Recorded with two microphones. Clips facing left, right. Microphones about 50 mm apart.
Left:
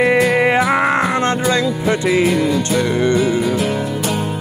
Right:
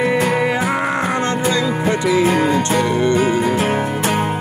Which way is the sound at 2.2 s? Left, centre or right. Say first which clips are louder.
Right 1 dB; right.